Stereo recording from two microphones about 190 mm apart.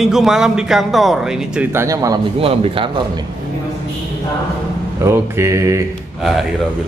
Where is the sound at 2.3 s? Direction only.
30° right (ahead or behind).